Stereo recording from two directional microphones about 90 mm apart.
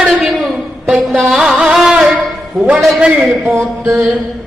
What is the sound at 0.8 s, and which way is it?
Music, 5° right (ahead or behind).